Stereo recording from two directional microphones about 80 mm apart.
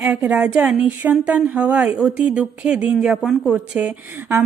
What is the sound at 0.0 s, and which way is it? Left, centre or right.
Speech, centre.